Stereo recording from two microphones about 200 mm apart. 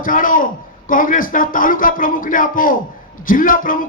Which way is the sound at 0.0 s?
45° left (ahead or behind).